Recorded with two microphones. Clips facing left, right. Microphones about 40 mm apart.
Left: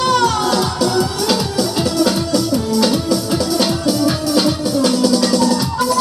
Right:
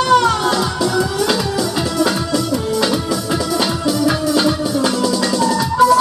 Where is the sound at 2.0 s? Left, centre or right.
Right.